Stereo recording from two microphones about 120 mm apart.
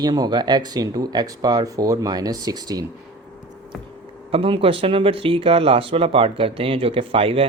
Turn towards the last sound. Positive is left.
turn(degrees=-50)  # may be behind; listen again after turning